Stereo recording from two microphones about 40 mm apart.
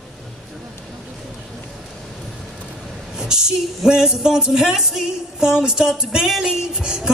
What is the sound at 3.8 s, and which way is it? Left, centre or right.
Music, centre.